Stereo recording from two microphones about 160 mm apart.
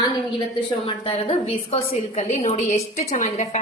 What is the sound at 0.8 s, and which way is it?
A woman's voice, 35° left (ahead or behind).